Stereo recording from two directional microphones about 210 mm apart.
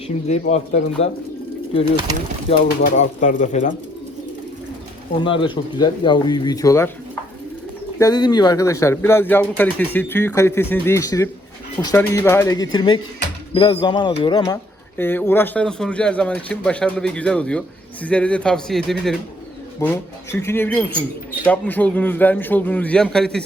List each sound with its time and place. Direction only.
0.3 s speech: 35° left (ahead or behind)
1.0 s speech: 65° left (ahead or behind)
2.8 s speech: 35° left (ahead or behind)
5.2 s speech: 25° left (ahead or behind)
7.9 s speech: 20° left (ahead or behind)